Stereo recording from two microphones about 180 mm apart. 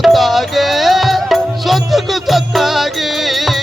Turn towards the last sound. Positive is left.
turn(degrees=0)  # may be behind; listen again after turning